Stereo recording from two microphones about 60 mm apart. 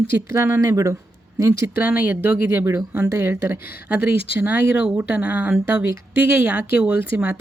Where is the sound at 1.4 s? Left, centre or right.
Right.